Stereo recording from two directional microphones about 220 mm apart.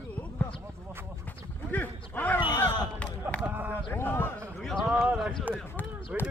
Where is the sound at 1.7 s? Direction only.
10° left (ahead or behind).